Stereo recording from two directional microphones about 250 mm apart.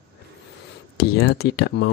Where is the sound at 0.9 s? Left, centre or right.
Left.